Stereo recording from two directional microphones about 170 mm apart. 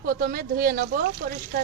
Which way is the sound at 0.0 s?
60° right (ahead or behind).